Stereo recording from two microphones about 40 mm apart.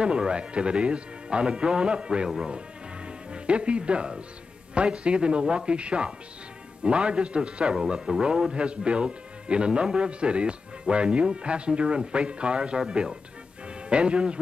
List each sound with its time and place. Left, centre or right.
0.0 s speech: right
7.7 s speech: centre